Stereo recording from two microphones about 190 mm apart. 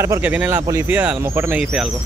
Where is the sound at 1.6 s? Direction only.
Centre (ahead or behind).